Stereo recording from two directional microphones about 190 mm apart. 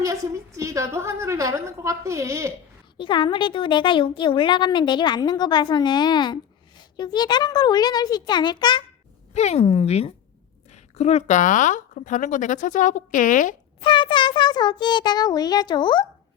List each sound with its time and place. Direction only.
0.0 s a woman's voice: 15° right (ahead or behind)
3.0 s speech: 25° left (ahead or behind)
9.3 s speech: 35° left (ahead or behind)
13.8 s speech: 25° left (ahead or behind)